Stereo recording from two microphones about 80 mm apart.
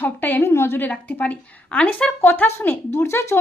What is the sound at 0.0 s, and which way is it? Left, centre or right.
Speech, left.